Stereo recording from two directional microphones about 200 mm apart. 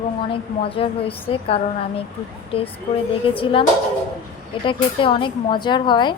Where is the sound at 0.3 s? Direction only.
25° left (ahead or behind).